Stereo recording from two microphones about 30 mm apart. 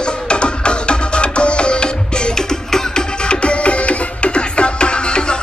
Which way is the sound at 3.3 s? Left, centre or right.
Left.